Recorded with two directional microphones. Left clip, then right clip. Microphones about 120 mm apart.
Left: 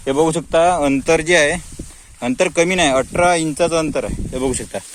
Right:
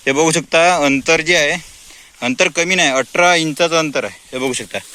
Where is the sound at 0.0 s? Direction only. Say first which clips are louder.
Right 2 dB; 10° right (ahead or behind).